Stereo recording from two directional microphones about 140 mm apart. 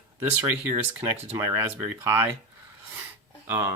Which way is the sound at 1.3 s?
15° right (ahead or behind).